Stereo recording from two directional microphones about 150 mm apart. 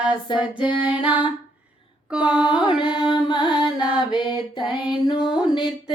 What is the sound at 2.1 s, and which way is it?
Mantra, 5° right (ahead or behind).